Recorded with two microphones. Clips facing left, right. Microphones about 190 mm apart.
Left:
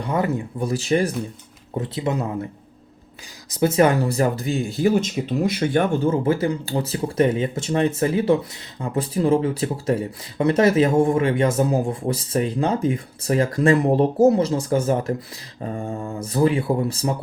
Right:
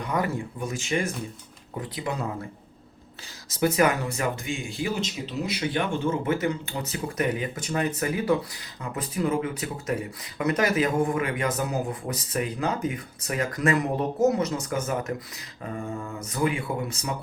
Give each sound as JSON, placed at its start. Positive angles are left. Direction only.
{"t": 0.0, "sound": "speech", "side_deg": 25}
{"t": 1.8, "sound": "speech", "side_deg": 25}
{"t": 3.5, "sound": "speech", "side_deg": 25}